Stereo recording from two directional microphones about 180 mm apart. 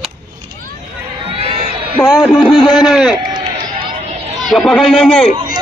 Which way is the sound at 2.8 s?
Centre (ahead or behind).